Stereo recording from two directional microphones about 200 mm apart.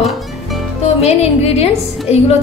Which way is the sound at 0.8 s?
30° left (ahead or behind).